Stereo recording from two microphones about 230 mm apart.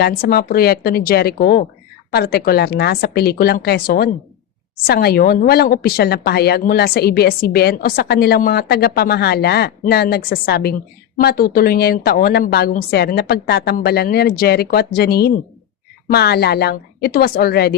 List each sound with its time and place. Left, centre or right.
0.0 s a woman's voice: left